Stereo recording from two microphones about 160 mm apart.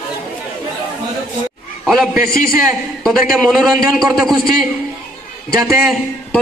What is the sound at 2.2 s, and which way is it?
Speech, 65° left (ahead or behind).